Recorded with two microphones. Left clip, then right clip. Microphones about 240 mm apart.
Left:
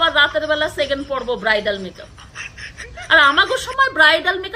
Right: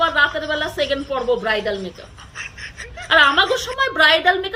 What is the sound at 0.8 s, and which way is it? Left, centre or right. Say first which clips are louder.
Speech: left 1 dB; centre.